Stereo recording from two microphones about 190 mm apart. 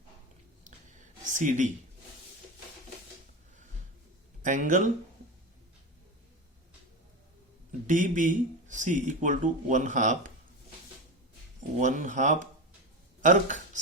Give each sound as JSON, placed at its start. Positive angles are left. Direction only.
{"t": 0.6, "sound": "a sound", "side_deg": -40}
{"t": 4.4, "sound": "speech", "side_deg": -40}
{"t": 7.9, "sound": "speech", "side_deg": -40}
{"t": 11.8, "sound": "speech", "side_deg": -40}